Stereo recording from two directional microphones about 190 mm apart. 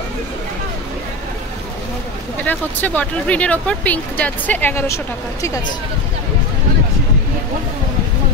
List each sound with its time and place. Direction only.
2.4 s speech: 10° left (ahead or behind)